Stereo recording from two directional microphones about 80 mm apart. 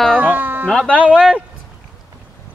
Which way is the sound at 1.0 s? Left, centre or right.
Centre.